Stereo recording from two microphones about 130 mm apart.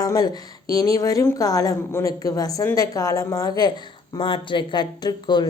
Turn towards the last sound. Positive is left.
turn(degrees=35)  # may be behind; listen again after turning